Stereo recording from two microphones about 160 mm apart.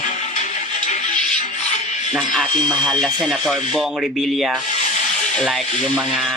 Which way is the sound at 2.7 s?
5° left (ahead or behind).